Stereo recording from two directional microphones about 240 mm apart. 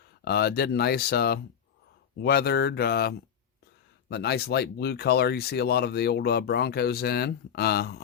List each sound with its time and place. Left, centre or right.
0.3 s speech: left